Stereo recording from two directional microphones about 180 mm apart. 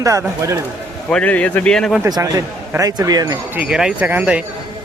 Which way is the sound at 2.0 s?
20° right (ahead or behind).